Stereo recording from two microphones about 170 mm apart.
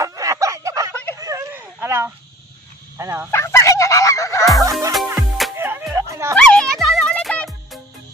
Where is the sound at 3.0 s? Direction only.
15° right (ahead or behind).